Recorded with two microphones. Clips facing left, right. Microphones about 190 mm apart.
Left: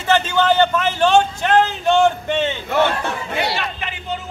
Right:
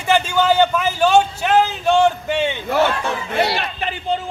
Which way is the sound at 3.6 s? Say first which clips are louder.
Right 2 dB; 40° right (ahead or behind).